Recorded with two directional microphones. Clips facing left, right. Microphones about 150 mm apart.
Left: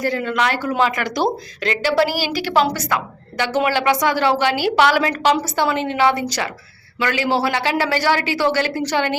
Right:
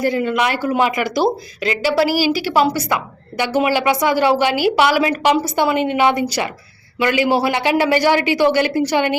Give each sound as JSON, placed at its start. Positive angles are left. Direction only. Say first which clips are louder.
{"t": 0.0, "sound": "speech", "louder": "right 3 dB", "side_deg": -10}